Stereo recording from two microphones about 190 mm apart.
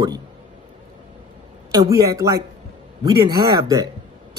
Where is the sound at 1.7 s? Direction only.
20° right (ahead or behind).